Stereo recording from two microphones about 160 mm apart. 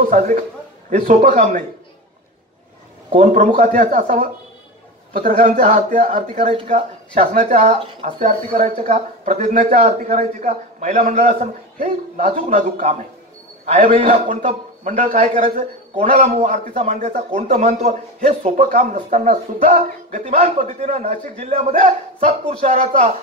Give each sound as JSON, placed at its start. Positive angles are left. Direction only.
{"t": 0.1, "sound": "a man's voice", "side_deg": -55}
{"t": 3.1, "sound": "speech", "side_deg": -45}
{"t": 6.1, "sound": "a man's voice", "side_deg": -40}
{"t": 21.7, "sound": "speech", "side_deg": -55}